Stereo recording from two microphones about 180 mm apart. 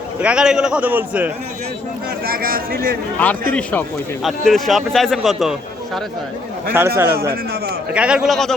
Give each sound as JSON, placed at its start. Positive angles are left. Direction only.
{"t": 0.2, "sound": "a man's voice", "side_deg": -5}
{"t": 2.2, "sound": "speech", "side_deg": -55}
{"t": 3.5, "sound": "speech", "side_deg": 5}
{"t": 6.7, "sound": "a man's voice", "side_deg": -15}